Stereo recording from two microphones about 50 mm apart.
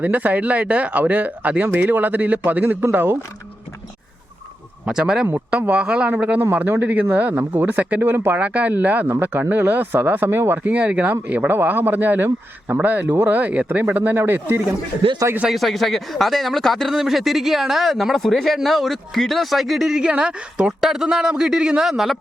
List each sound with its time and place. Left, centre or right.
0.0 s speech: right
4.9 s a man's voice: centre
5.5 s a woman's voice: right
8.1 s speech: right
8.4 s speech: right
10.6 s speech: right
11.5 s speech: right
15.4 s speech: centre
16.9 s speech: centre
20.0 s a woman's voice: centre